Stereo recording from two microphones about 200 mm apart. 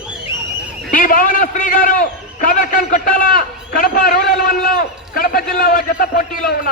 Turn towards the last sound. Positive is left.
turn(degrees=45)  # may be behind; listen again after turning